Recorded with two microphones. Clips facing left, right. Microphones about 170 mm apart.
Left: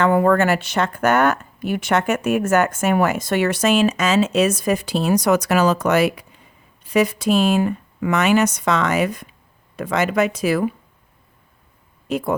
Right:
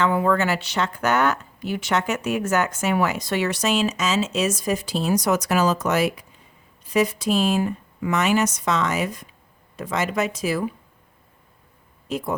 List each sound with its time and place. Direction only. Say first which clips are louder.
0.0 s speech: left 5 dB; 55° left (ahead or behind)
12.0 s speech: left 5 dB; 60° left (ahead or behind)